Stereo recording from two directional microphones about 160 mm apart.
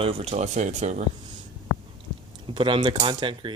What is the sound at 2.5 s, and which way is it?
Speech, 30° right (ahead or behind).